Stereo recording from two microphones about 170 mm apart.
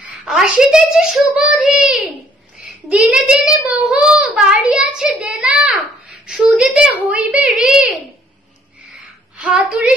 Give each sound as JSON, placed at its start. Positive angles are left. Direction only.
{"t": 0.0, "sound": "a child's voice", "side_deg": -5}
{"t": 9.4, "sound": "a child's voice", "side_deg": -5}